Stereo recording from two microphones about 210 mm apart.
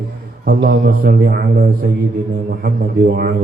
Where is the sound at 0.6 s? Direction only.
45° right (ahead or behind).